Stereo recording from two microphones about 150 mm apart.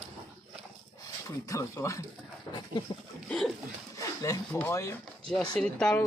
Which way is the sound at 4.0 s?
20° left (ahead or behind).